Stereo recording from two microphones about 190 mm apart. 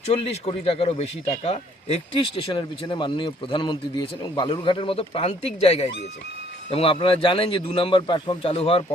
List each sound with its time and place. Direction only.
0.0 s speech: 35° left (ahead or behind)